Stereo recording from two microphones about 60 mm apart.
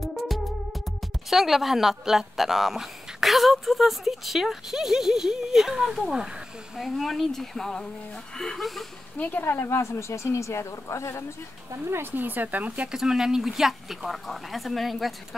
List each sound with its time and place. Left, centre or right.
0.0 s music: centre
1.3 s a woman's voice: centre
9.4 s speech: left
9.8 s speech: left
11.9 s speech: right
12.9 s a woman's voice: centre